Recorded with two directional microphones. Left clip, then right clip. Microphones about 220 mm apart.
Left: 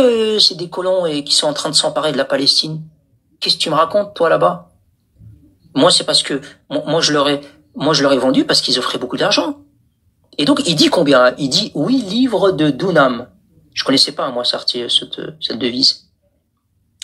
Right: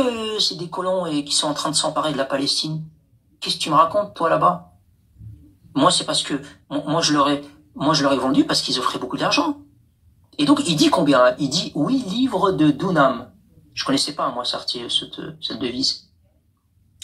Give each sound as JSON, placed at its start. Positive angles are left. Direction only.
{"t": 0.0, "sound": "speech", "side_deg": 20}
{"t": 5.7, "sound": "speech", "side_deg": 20}